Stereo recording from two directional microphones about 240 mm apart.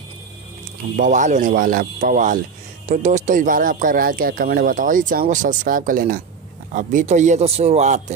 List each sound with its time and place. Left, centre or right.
0.9 s speech: right